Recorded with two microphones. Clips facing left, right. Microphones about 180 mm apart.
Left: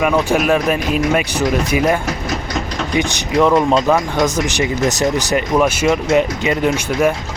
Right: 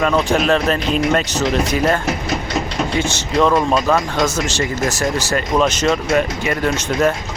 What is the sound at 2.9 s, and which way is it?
Speech, 15° left (ahead or behind).